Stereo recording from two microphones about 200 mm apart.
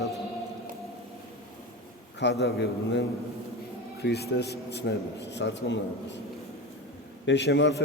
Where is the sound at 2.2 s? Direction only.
60° left (ahead or behind).